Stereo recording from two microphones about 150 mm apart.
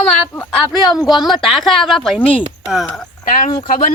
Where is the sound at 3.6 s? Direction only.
65° left (ahead or behind).